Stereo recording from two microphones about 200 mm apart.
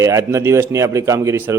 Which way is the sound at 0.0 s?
15° right (ahead or behind).